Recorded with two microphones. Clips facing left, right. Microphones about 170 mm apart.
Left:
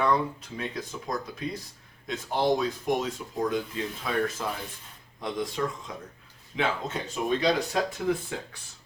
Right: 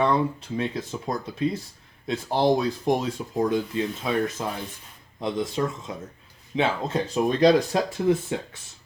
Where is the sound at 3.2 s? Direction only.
30° right (ahead or behind).